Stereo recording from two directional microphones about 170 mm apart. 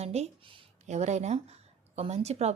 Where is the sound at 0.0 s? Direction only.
40° right (ahead or behind).